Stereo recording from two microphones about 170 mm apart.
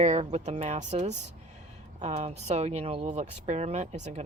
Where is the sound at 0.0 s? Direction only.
40° right (ahead or behind).